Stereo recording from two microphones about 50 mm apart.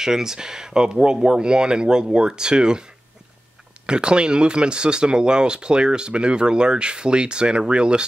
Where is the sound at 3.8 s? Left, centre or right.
Centre.